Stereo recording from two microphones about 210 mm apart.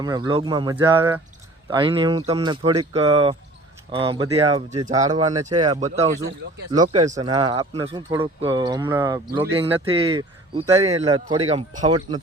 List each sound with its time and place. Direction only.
0.0 s speech: 20° right (ahead or behind)
6.7 s speech: 35° right (ahead or behind)
7.2 s speech: 20° right (ahead or behind)
9.6 s speech: 25° right (ahead or behind)
11.9 s speech: 20° right (ahead or behind)